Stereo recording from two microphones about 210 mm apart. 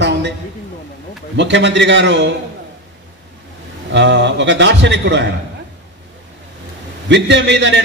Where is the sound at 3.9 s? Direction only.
55° right (ahead or behind).